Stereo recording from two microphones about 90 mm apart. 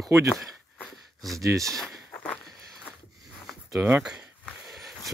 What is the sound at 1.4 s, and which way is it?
Speech, 35° right (ahead or behind).